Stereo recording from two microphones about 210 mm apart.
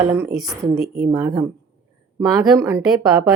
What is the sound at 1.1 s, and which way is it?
Speech, 15° right (ahead or behind).